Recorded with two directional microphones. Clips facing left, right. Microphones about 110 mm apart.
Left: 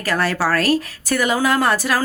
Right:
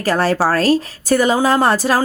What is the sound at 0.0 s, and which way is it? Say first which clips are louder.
Speech: right 4 dB; 30° right (ahead or behind).